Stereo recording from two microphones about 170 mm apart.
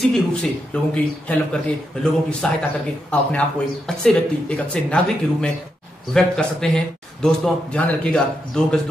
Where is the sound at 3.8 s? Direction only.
5° left (ahead or behind).